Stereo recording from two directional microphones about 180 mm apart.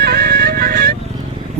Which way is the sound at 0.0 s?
60° right (ahead or behind).